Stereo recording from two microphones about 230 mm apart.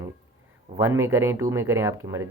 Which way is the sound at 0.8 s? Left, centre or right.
Centre.